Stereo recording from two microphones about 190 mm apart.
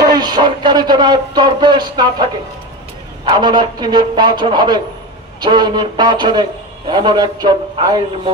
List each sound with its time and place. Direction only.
0.1 s speech: 20° right (ahead or behind)
3.3 s speech: 25° right (ahead or behind)